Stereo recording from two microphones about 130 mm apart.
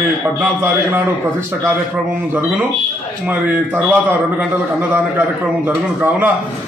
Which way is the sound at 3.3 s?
10° right (ahead or behind).